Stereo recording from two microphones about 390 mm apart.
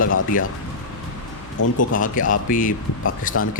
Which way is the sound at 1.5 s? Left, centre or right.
Left.